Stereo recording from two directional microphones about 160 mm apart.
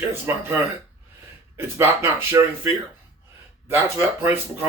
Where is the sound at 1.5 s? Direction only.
15° right (ahead or behind).